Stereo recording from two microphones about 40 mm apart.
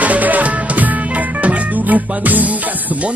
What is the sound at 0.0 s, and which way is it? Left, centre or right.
Music, right.